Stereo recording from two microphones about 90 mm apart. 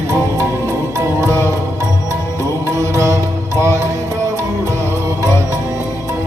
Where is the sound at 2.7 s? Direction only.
35° right (ahead or behind).